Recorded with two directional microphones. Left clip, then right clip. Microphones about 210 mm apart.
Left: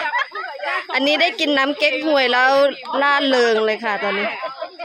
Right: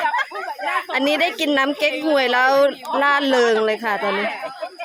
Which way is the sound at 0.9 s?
Centre (ahead or behind).